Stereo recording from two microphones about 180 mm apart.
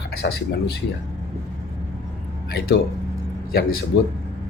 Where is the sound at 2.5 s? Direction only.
60° left (ahead or behind).